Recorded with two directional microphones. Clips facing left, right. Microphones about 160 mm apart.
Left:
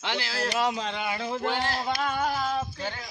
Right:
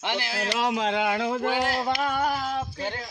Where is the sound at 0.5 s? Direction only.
90° right; by 1.4 s 75° right (ahead or behind).